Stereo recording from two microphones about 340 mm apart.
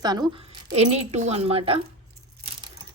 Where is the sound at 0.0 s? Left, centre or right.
Centre.